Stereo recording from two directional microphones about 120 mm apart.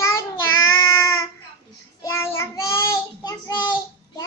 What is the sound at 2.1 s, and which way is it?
Child singing, 20° left (ahead or behind).